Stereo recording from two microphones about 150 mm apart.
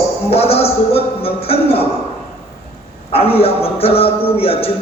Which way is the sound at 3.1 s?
40° left (ahead or behind).